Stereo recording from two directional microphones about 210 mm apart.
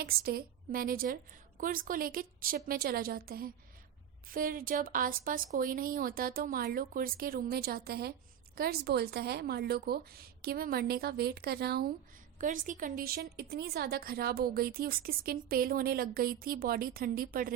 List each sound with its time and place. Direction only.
0.0 s a woman's voice: 45° right (ahead or behind)
12.4 s a woman's voice: 40° right (ahead or behind)